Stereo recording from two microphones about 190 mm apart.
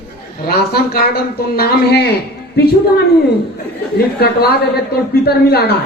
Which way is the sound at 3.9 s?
55° left (ahead or behind).